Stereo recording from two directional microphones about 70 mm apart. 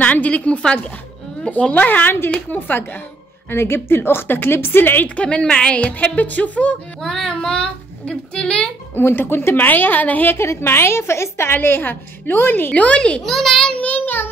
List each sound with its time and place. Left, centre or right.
0.0 s a woman's voice: left
3.4 s a woman's voice: left; by 7.1 s centre
7.1 s a child's voice: centre
8.9 s a woman's voice: left
10.3 s a woman's voice: left
11.5 s a woman's voice: left
12.7 s a child's voice: centre
13.2 s a child's voice: centre
13.7 s child singing: left